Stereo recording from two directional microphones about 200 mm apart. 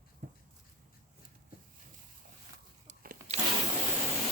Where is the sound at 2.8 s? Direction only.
45° right (ahead or behind).